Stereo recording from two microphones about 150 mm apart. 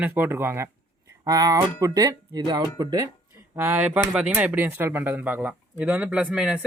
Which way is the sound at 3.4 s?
15° right (ahead or behind).